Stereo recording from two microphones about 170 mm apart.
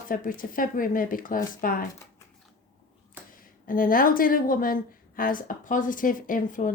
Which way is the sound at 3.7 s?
55° left (ahead or behind).